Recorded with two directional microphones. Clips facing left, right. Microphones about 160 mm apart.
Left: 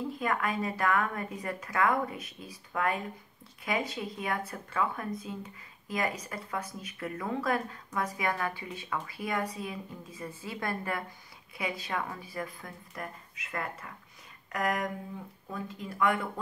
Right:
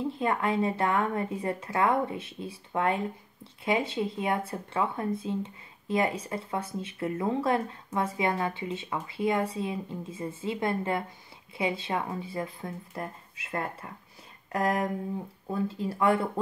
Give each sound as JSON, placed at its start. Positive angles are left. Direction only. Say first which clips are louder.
{"t": 0.1, "sound": "speech", "louder": "right 4 dB", "side_deg": -25}